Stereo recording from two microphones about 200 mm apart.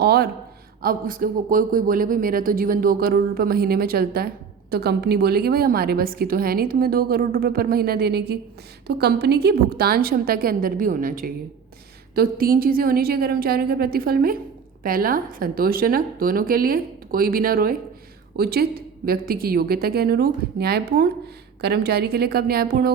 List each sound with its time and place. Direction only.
0.0 s a woman's voice: 55° right (ahead or behind)